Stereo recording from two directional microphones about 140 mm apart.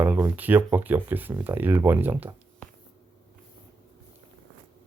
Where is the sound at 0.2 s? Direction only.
15° right (ahead or behind).